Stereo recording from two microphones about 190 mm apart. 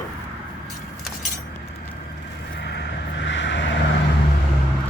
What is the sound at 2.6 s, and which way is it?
Vehicle, 65° left (ahead or behind).